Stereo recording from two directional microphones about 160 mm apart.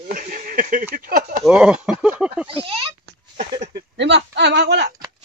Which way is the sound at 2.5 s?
35° right (ahead or behind).